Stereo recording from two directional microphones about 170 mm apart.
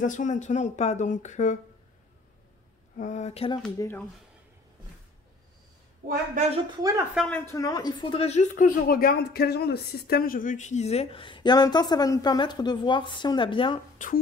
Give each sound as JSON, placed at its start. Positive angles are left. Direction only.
{"t": 0.0, "sound": "speech", "side_deg": 50}
{"t": 3.0, "sound": "a sound", "side_deg": 45}
{"t": 3.7, "sound": "speech", "side_deg": 15}
{"t": 6.8, "sound": "speech", "side_deg": -20}
{"t": 7.2, "sound": "speech", "side_deg": 5}
{"t": 7.5, "sound": "a woman's voice", "side_deg": 20}
{"t": 13.9, "sound": "speech", "side_deg": 50}